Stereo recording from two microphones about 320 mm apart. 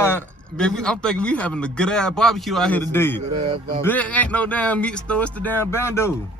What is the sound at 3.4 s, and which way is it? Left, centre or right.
Speech, centre.